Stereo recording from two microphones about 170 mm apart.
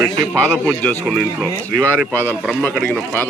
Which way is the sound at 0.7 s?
10° left (ahead or behind).